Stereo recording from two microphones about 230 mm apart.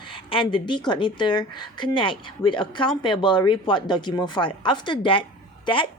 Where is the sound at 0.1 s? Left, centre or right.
Left.